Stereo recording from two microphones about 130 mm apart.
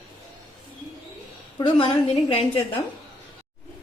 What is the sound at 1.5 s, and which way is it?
Speech, 35° left (ahead or behind).